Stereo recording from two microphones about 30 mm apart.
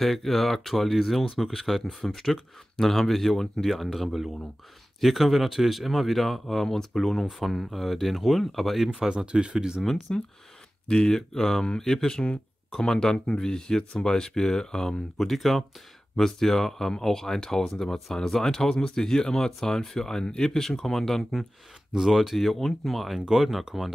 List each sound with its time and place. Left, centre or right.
0.0 s speech: centre
2.0 s speech: centre
9.2 s speech: right
10.1 s speech: left
11.1 s speech: centre
12.2 s speech: left
15.1 s speech: centre
22.1 s speech: centre
22.4 s speech: centre
23.1 s speech: centre